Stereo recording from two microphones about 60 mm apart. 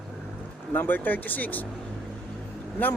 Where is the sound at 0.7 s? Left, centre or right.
Left.